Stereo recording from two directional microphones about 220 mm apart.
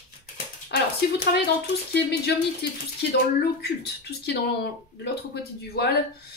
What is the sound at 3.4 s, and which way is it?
A woman's voice, 45° left (ahead or behind).